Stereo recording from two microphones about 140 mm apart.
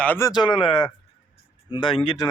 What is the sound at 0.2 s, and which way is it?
Speech, 30° left (ahead or behind).